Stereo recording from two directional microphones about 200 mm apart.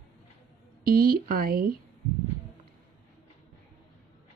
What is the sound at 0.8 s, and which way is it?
Speech, 50° right (ahead or behind).